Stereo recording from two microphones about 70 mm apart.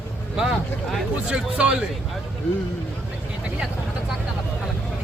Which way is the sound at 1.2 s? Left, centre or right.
Centre.